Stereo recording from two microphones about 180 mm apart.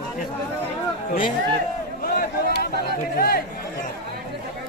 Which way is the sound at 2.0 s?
55° left (ahead or behind).